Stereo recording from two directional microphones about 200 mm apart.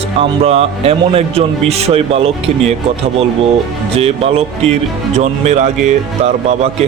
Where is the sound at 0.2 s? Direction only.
30° right (ahead or behind).